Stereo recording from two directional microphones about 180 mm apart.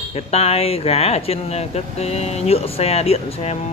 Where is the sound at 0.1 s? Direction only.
35° left (ahead or behind).